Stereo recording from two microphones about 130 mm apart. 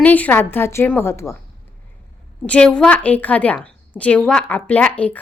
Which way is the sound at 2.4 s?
10° left (ahead or behind).